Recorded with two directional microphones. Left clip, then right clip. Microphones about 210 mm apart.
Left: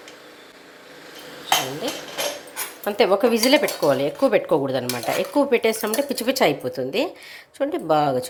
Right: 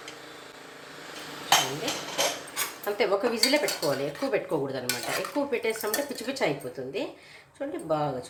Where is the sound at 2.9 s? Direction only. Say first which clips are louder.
Left 8 dB; 40° left (ahead or behind).